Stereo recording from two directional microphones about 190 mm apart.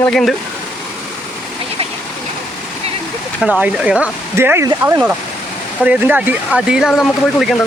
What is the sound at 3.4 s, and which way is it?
Speech, 5° right (ahead or behind).